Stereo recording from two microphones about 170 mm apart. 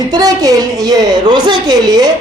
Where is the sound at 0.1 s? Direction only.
20° right (ahead or behind).